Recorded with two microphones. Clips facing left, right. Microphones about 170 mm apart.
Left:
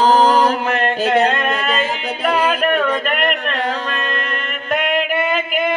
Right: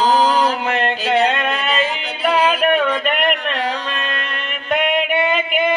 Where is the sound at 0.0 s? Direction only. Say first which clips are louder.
Left 2 dB; 50° left (ahead or behind).